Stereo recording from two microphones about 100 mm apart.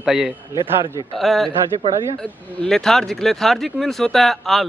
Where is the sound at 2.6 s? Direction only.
5° left (ahead or behind).